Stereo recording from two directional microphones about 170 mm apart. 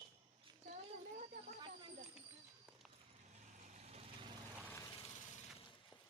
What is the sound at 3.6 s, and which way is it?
Vehicle, 45° right (ahead or behind).